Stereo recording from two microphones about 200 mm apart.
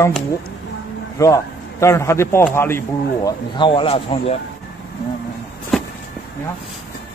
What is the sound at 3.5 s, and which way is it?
Speech, 25° left (ahead or behind).